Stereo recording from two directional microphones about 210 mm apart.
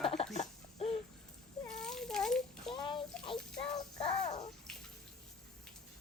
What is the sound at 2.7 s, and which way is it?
Bathtub, 20° left (ahead or behind).